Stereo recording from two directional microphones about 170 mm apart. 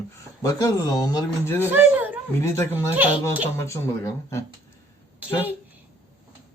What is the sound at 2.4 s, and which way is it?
Speech, 15° left (ahead or behind).